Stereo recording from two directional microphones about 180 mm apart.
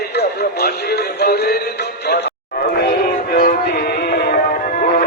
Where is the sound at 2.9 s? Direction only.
50° left (ahead or behind).